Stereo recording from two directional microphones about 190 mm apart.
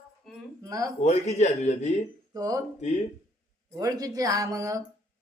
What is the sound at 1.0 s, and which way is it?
Speech, 35° left (ahead or behind).